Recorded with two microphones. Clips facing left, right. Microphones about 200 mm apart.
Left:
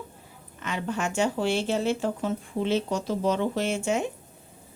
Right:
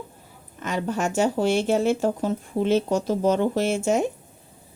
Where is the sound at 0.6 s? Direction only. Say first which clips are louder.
Right 4 dB; 40° right (ahead or behind).